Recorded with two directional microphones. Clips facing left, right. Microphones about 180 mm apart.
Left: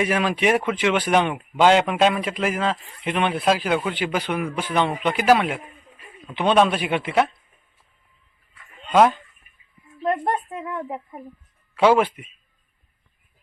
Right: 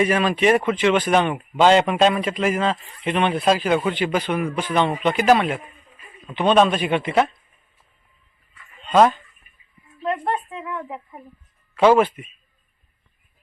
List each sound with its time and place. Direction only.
0.0 s speech: 10° left (ahead or behind)
8.9 s speech: 10° left (ahead or behind)
10.0 s a woman's voice: 40° left (ahead or behind)
11.7 s speech: 10° left (ahead or behind)